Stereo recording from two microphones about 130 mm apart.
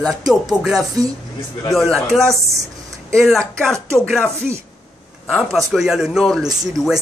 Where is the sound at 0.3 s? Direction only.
5° right (ahead or behind).